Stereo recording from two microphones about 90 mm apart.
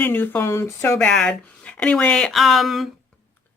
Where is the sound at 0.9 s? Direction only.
10° left (ahead or behind).